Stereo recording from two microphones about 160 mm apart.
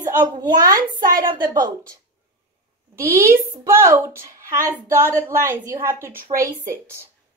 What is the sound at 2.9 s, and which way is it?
Speech, 65° right (ahead or behind).